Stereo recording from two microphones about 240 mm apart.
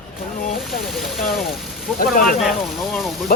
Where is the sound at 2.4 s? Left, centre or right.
Centre.